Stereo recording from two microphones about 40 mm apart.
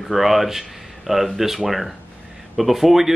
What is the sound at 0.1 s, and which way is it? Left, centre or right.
Speech, centre.